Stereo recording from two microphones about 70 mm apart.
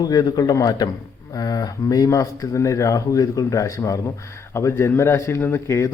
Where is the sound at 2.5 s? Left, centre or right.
Left.